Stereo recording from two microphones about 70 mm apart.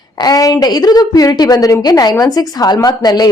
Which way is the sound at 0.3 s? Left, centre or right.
Left.